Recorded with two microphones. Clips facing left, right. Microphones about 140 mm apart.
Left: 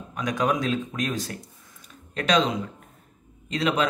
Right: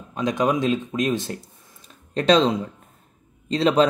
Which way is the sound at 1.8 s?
30° right (ahead or behind).